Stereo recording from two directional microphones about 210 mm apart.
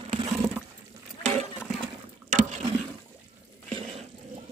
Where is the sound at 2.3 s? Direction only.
35° right (ahead or behind).